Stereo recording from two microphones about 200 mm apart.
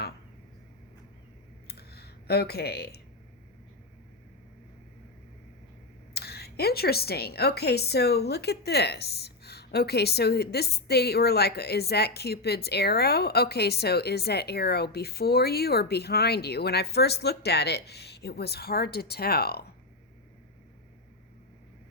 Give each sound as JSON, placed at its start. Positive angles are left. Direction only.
{"t": 1.6, "sound": "computer keyboard", "side_deg": 50}
{"t": 6.1, "sound": "a woman's voice", "side_deg": 50}